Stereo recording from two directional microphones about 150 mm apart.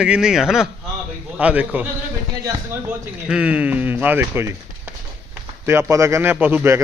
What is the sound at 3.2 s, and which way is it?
A man's voice, 10° right (ahead or behind).